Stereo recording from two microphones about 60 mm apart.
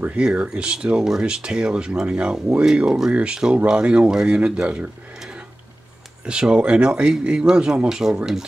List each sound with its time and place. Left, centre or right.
0.0 s speech: centre
6.2 s speech: centre